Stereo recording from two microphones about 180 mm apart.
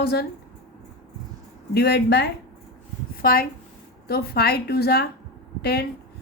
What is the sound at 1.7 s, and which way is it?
Speech, 65° left (ahead or behind).